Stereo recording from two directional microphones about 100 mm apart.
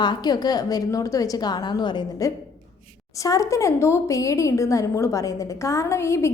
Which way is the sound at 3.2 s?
35° left (ahead or behind).